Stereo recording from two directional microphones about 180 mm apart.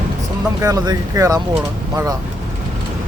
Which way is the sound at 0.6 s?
20° right (ahead or behind).